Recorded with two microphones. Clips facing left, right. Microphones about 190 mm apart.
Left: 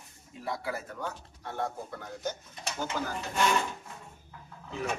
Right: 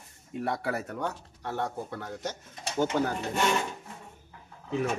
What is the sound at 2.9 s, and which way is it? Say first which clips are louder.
Speech: right 6 dB; 60° right (ahead or behind).